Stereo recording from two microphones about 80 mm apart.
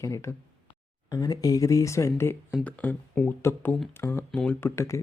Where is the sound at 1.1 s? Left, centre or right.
Left.